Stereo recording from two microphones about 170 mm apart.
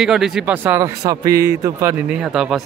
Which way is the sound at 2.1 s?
5° right (ahead or behind).